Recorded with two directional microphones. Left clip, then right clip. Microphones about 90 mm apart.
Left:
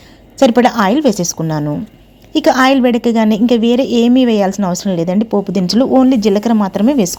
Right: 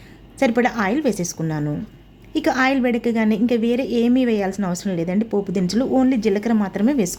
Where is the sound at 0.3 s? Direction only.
50° left (ahead or behind).